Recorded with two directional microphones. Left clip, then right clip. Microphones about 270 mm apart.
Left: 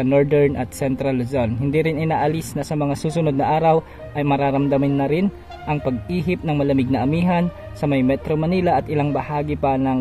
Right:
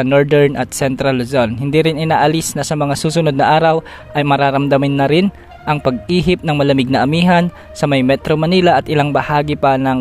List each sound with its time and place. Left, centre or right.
0.0 s speech: right